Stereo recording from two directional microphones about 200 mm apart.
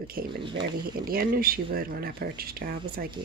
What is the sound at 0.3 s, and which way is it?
Speech, 25° right (ahead or behind).